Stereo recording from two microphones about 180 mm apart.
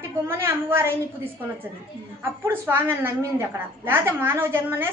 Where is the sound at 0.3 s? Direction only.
15° right (ahead or behind).